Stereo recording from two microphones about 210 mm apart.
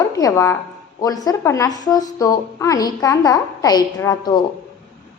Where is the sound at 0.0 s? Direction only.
15° left (ahead or behind).